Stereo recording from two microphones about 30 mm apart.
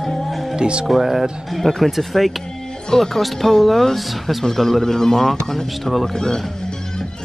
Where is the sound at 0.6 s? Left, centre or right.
Right.